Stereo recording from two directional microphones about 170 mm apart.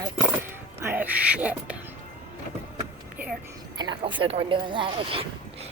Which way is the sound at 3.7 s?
25° right (ahead or behind).